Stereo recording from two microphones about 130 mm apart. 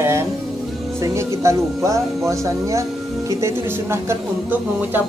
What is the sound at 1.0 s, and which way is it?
Speech, 20° right (ahead or behind).